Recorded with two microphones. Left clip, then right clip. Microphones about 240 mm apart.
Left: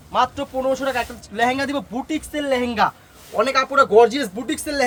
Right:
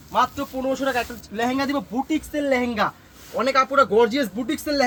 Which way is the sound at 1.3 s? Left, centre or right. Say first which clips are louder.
Left 3 dB; left.